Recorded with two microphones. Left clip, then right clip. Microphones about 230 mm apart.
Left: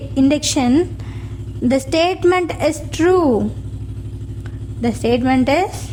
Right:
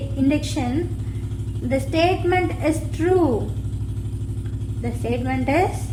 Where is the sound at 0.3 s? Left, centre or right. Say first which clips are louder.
Left 6 dB; left.